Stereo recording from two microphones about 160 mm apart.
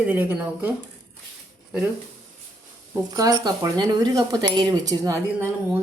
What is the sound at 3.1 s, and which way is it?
Speech, 20° right (ahead or behind).